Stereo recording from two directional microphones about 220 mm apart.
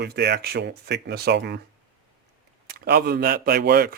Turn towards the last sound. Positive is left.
turn(degrees=-45)  # may be behind; listen again after turning